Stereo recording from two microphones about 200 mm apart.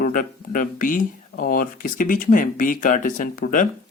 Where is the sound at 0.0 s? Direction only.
45° left (ahead or behind).